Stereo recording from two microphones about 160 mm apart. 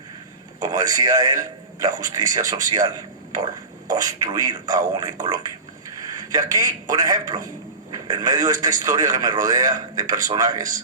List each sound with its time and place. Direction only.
0.6 s a man's voice: 25° right (ahead or behind)
6.0 s a sound: 25° right (ahead or behind)
6.9 s a man's voice: 25° right (ahead or behind)